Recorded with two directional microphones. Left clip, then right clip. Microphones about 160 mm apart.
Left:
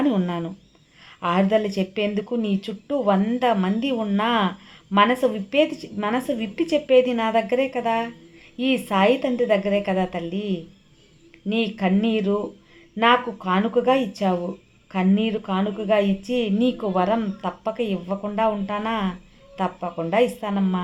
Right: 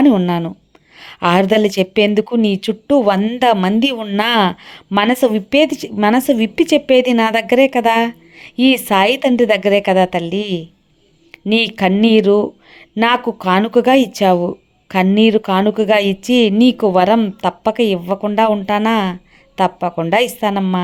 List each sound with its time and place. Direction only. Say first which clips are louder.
0.1 s a woman's voice: right 10 dB; 45° right (ahead or behind)